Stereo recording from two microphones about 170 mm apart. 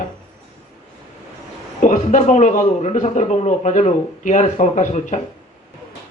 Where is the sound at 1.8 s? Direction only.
45° left (ahead or behind).